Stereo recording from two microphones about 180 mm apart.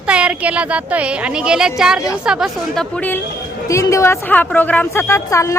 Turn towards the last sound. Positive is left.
turn(degrees=15)  # may be behind; listen again after turning